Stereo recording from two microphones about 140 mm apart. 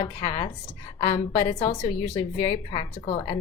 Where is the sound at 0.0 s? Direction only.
30° left (ahead or behind).